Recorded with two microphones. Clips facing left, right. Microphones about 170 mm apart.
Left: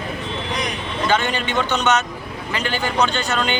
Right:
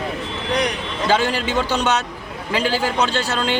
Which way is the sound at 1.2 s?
90° right.